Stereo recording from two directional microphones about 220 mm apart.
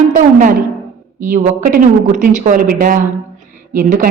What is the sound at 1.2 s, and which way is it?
A woman's voice, 35° right (ahead or behind).